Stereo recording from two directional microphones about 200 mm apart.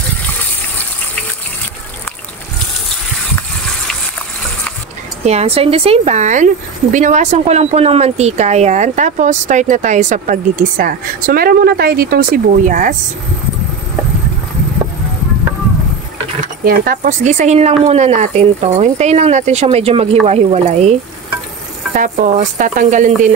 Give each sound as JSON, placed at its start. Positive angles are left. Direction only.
{"t": 5.2, "sound": "speech", "side_deg": -30}
{"t": 16.6, "sound": "speech", "side_deg": -45}
{"t": 21.9, "sound": "speech", "side_deg": -40}